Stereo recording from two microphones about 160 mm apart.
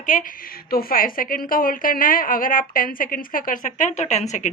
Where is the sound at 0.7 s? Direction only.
65° left (ahead or behind).